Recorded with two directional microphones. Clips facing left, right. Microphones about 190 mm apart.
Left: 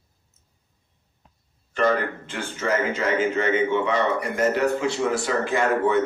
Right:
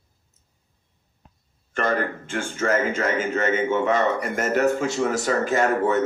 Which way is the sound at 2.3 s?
50° right (ahead or behind).